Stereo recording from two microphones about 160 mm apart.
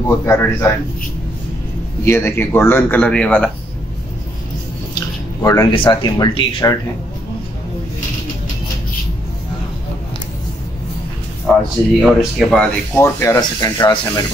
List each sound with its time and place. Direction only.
0.0 s speech: 15° left (ahead or behind)
2.0 s speech: 15° left (ahead or behind)
5.4 s speech: 20° left (ahead or behind)
12.0 s speech: centre (ahead or behind)
12.9 s speech: 15° left (ahead or behind)